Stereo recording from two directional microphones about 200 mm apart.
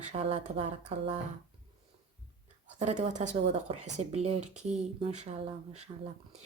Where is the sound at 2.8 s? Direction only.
35° right (ahead or behind).